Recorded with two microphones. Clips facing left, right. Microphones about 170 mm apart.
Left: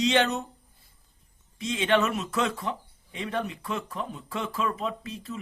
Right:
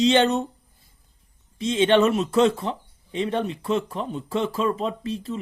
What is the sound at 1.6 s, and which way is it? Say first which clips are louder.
Speech: right 6 dB; 30° right (ahead or behind).